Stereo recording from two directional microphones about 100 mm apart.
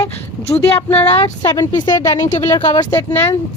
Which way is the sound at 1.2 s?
40° left (ahead or behind).